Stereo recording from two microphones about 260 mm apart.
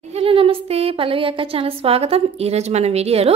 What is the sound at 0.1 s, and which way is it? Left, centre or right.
Speech, right.